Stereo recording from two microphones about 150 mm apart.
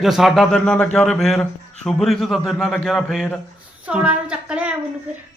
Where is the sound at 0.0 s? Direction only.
Centre (ahead or behind).